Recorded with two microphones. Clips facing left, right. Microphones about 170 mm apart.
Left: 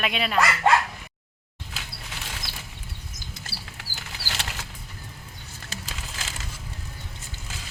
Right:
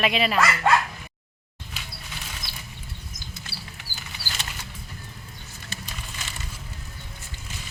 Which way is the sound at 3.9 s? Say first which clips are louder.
Left 2 dB; 75° left (ahead or behind).